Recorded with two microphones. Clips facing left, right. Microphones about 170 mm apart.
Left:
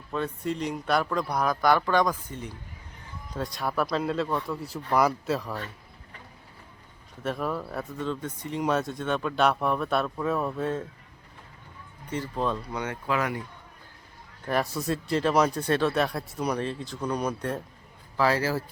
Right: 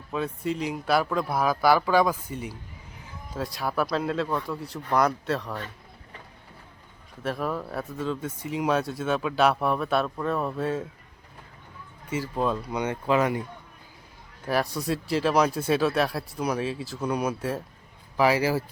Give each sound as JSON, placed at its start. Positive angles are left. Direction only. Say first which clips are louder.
{"t": 0.1, "sound": "speech", "louder": "right 1 dB", "side_deg": -5}
{"t": 7.2, "sound": "speech", "louder": "right 1 dB", "side_deg": 0}
{"t": 12.1, "sound": "speech", "louder": "right 2 dB", "side_deg": -5}
{"t": 12.8, "sound": "speech", "louder": "right 6 dB", "side_deg": -20}
{"t": 14.4, "sound": "speech", "louder": "right 1 dB", "side_deg": 0}